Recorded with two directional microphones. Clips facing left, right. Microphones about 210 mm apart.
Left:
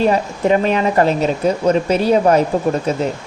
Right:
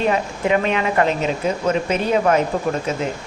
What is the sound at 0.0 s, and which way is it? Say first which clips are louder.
Speech: left 4 dB; 35° left (ahead or behind).